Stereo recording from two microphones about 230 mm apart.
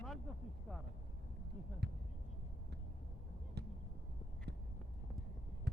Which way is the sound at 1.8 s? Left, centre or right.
Right.